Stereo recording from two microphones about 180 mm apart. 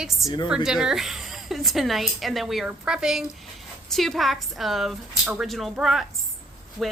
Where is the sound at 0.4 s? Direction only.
5° right (ahead or behind).